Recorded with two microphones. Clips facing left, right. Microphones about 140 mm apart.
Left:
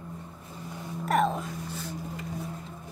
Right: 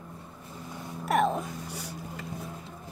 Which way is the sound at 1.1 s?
10° right (ahead or behind).